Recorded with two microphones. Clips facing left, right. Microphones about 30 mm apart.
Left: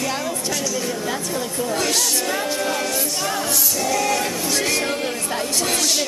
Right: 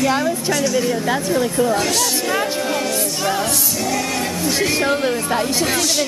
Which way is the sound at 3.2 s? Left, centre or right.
Centre.